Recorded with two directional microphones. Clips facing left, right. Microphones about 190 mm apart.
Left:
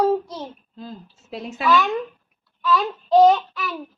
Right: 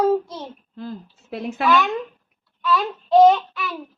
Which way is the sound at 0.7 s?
60° right (ahead or behind).